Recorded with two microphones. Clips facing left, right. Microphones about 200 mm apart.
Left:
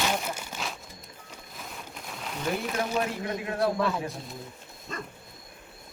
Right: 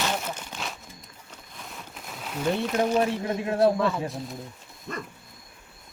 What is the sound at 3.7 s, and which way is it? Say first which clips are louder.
Speech: right 2 dB; centre (ahead or behind).